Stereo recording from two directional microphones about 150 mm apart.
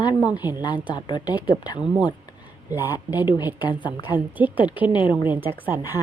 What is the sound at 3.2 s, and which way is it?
Speech, 25° left (ahead or behind).